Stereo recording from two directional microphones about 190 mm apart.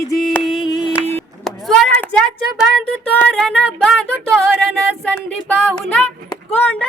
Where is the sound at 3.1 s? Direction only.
5° left (ahead or behind).